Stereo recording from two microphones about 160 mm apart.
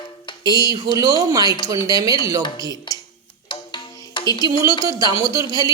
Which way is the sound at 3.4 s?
30° left (ahead or behind).